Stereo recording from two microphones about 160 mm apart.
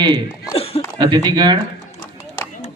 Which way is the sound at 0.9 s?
25° right (ahead or behind).